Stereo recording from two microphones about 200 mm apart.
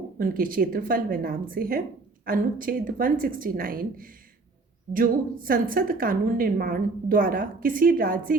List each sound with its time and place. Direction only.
0.2 s a woman's voice: 45° right (ahead or behind)